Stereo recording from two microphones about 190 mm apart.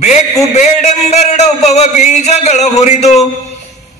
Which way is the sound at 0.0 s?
35° left (ahead or behind).